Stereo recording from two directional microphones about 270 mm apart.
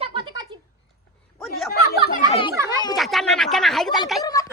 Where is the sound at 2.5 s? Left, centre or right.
Centre.